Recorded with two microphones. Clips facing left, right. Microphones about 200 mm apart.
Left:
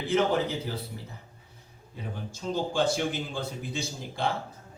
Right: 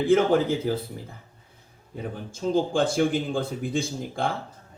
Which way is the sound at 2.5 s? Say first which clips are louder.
Right 4 dB; 50° right (ahead or behind).